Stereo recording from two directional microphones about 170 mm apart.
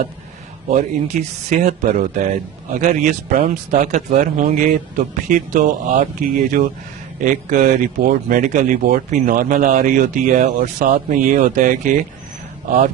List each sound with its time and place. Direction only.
0.7 s speech: 40° right (ahead or behind)